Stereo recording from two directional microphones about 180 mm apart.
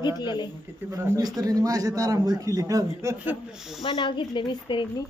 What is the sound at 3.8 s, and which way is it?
A woman's voice, 25° left (ahead or behind).